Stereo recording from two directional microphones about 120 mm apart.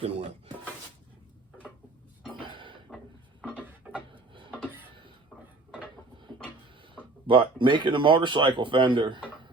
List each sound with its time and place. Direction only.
0.0 s speech: 55° right (ahead or behind)
2.5 s a sound: 45° right (ahead or behind)
4.1 s rub: 45° right (ahead or behind)
7.3 s speech: 45° right (ahead or behind)